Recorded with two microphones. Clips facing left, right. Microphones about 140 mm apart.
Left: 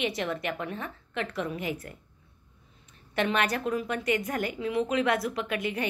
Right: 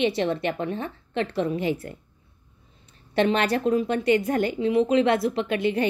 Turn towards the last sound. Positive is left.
turn(degrees=-30)  # may be behind; listen again after turning